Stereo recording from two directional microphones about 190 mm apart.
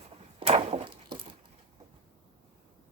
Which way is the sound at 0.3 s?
30° right (ahead or behind).